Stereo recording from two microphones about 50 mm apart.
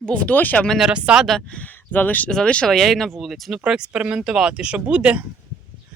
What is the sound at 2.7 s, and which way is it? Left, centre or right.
Speech, centre.